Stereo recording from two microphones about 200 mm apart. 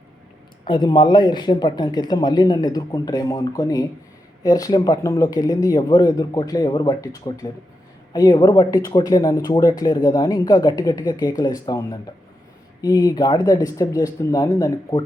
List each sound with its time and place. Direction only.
0.6 s speech: 20° left (ahead or behind)